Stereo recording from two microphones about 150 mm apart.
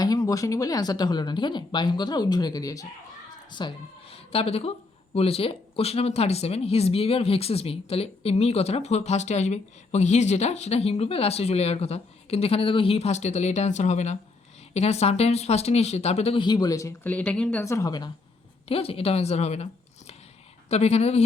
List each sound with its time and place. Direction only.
0.0 s speech: 25° left (ahead or behind)
17.1 s speech: 10° left (ahead or behind)
17.6 s speech: 20° left (ahead or behind)
18.7 s speech: 40° left (ahead or behind)
20.7 s speech: 45° left (ahead or behind)